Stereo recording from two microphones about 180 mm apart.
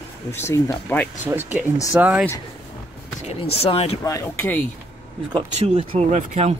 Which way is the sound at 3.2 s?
35° left (ahead or behind).